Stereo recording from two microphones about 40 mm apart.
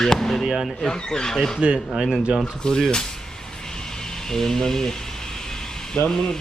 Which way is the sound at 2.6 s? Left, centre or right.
Centre.